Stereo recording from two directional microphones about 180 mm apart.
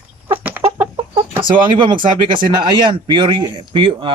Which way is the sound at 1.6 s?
25° right (ahead or behind).